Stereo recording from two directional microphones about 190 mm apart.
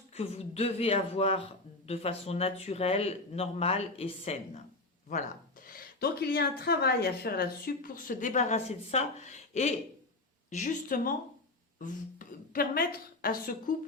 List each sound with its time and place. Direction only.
0.1 s speech: 35° left (ahead or behind)
5.0 s speech: 45° left (ahead or behind)